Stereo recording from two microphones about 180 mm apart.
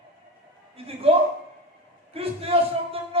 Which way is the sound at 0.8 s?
30° right (ahead or behind).